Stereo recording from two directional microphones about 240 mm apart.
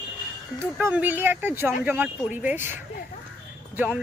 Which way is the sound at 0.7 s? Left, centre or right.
Centre.